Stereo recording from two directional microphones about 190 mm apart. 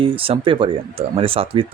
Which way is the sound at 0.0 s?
30° right (ahead or behind).